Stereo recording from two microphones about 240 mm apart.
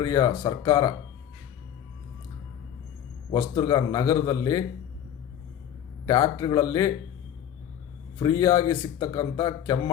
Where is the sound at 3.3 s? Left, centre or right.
Centre.